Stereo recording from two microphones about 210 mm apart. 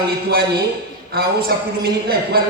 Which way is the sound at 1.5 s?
45° right (ahead or behind).